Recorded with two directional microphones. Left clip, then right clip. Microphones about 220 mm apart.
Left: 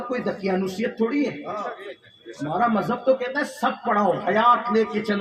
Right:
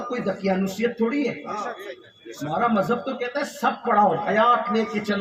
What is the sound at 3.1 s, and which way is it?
A man's voice, 55° left (ahead or behind).